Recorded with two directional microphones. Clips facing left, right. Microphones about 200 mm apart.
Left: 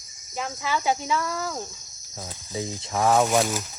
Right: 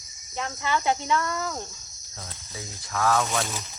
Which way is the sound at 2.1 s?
15° left (ahead or behind).